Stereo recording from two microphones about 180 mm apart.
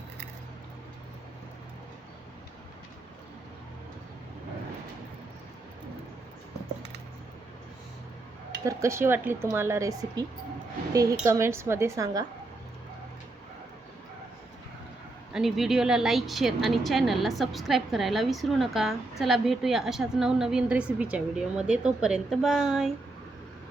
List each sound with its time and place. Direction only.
8.6 s a woman's voice: 15° right (ahead or behind)
15.3 s a woman's voice: centre (ahead or behind)